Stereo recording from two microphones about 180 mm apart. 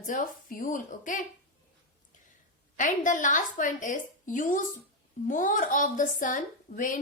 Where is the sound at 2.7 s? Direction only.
45° left (ahead or behind).